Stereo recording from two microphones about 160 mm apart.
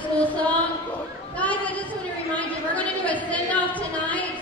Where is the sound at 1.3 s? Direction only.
10° left (ahead or behind).